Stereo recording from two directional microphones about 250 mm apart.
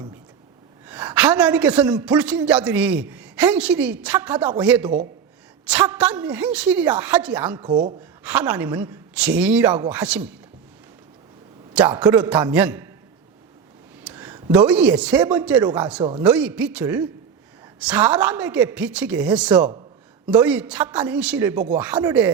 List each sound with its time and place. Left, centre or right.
0.9 s a man's voice: centre
7.7 s speech: centre
8.2 s a man's voice: centre
11.7 s a man's voice: centre
14.0 s a sound: centre
14.5 s a man's voice: centre